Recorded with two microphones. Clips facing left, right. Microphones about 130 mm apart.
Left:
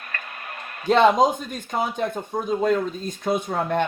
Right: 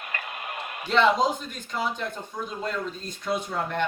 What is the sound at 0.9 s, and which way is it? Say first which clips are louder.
Speech: left 5 dB; 50° left (ahead or behind).